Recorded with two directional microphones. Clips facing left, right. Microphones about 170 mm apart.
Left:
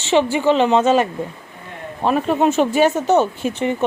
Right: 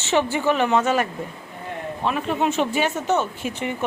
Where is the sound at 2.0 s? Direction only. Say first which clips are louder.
Left 6 dB; 40° left (ahead or behind).